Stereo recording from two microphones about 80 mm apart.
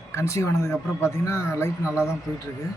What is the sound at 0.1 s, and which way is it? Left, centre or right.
Speech, left.